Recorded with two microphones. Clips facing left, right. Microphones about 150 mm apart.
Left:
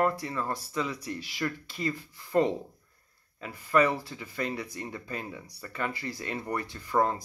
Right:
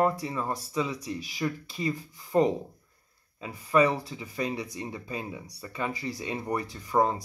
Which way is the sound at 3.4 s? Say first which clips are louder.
Right 1 dB; 15° right (ahead or behind).